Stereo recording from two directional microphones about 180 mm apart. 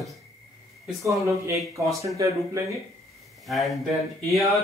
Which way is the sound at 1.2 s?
15° right (ahead or behind).